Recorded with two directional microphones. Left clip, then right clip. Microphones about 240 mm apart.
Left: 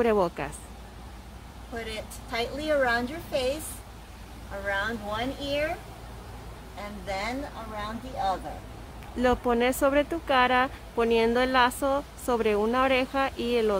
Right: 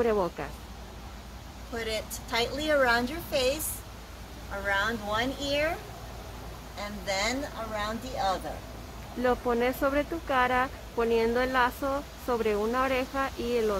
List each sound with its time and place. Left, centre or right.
0.0 s speech: left
1.8 s a woman's voice: centre
4.6 s a woman's voice: centre
6.8 s a woman's voice: centre
9.2 s speech: left